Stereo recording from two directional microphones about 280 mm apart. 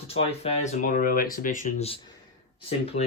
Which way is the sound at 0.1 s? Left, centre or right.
Left.